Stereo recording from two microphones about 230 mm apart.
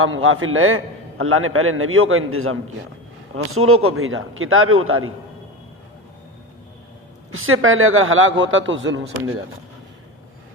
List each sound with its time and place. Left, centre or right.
0.0 s a man's voice: right
7.3 s a man's voice: right